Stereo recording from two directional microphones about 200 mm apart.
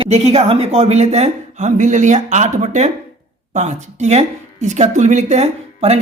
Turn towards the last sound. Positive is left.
turn(degrees=-30)  # may be behind; listen again after turning